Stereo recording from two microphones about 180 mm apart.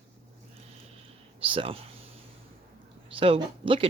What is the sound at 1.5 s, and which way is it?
Speech, 30° right (ahead or behind).